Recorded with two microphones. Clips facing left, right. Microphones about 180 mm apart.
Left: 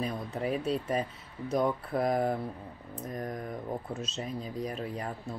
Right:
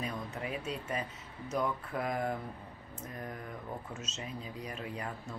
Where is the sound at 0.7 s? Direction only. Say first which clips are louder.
Left 7 dB; 35° left (ahead or behind).